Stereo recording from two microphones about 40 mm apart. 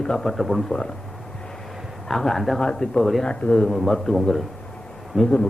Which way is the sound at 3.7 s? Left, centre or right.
Centre.